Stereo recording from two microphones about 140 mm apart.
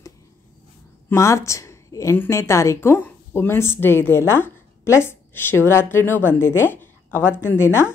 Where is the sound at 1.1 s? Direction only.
20° left (ahead or behind).